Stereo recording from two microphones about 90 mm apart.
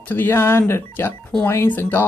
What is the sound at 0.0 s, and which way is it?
Speech, 20° left (ahead or behind).